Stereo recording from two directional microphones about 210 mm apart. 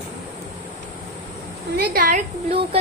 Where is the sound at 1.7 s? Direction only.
45° right (ahead or behind).